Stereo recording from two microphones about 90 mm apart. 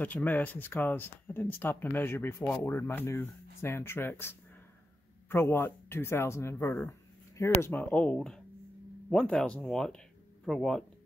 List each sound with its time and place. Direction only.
0.0 s speech: 20° left (ahead or behind)
7.7 s speech: 15° left (ahead or behind)